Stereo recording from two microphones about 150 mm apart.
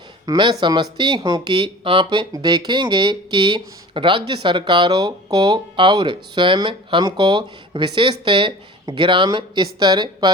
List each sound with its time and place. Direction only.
0.3 s speech: 30° right (ahead or behind)